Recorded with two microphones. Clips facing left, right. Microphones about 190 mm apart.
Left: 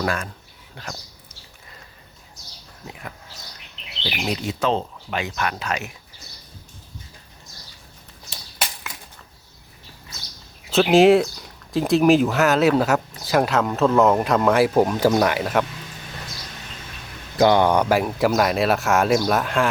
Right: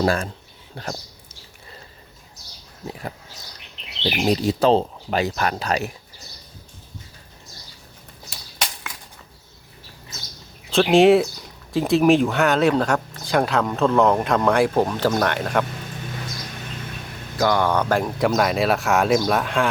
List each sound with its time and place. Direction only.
0.0 s speech: 30° right (ahead or behind)
4.0 s speech: 35° right (ahead or behind)
10.7 s speech: centre (ahead or behind)
17.3 s speech: 20° left (ahead or behind); by 19.7 s centre (ahead or behind)